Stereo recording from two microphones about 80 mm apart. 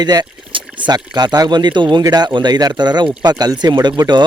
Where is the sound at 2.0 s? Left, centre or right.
Right.